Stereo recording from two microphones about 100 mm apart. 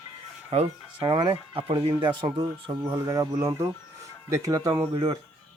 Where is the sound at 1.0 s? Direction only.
50° right (ahead or behind).